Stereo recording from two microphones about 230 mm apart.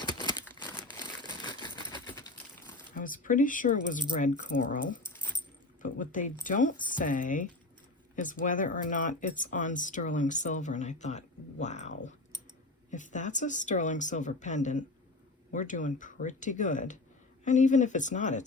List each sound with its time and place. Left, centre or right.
0.0 s crumpling: centre
0.9 s a sound: centre
2.9 s speech: left